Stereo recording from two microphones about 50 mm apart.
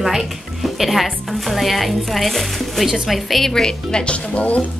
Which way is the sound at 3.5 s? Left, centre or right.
Centre.